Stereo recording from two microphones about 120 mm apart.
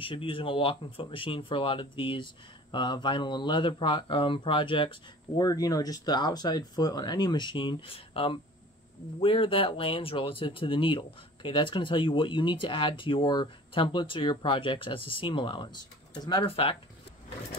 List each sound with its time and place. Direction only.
0.0 s speech: 45° left (ahead or behind)
5.4 s speech: 30° left (ahead or behind)
16.4 s speech: 50° left (ahead or behind)